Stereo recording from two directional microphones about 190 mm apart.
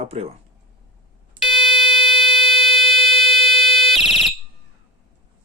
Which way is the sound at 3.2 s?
Centre (ahead or behind).